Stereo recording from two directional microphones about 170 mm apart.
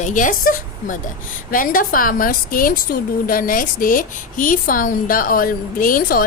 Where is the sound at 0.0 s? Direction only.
50° left (ahead or behind).